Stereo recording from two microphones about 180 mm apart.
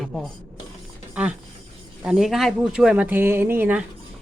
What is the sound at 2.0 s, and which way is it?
Speech, 5° right (ahead or behind).